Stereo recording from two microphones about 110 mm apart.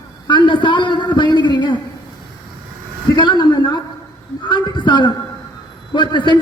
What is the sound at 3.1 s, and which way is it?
Speech, 40° left (ahead or behind).